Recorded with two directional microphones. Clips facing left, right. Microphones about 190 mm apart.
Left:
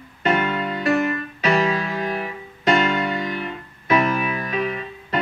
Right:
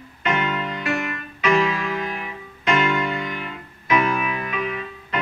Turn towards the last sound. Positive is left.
turn(degrees=35)  # may be behind; listen again after turning